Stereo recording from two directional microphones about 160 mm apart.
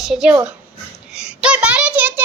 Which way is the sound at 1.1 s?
5° right (ahead or behind).